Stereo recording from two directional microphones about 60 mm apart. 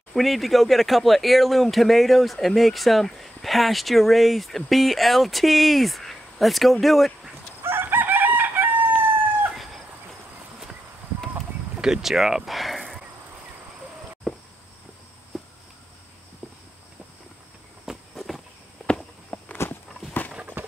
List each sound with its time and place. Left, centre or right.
0.1 s speech: centre
7.6 s chicken: right
11.7 s speech: centre
15.3 s a sound: centre
17.8 s walk: centre
19.3 s walk: left
20.6 s a sound: right